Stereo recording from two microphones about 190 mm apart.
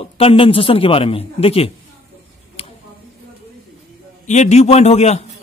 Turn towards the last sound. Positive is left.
turn(degrees=35)  # may be behind; listen again after turning